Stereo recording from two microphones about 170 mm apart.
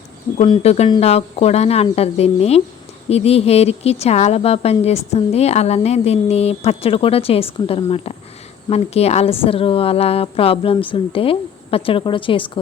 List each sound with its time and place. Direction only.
0.3 s a woman's voice: 35° left (ahead or behind)